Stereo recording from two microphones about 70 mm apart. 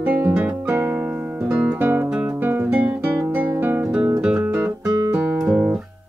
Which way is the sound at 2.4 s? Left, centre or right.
Right.